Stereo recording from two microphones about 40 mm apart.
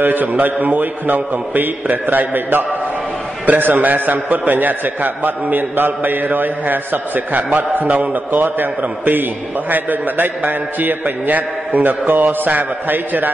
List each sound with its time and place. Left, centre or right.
0.0 s a man's voice: right
8.4 s a man's voice: right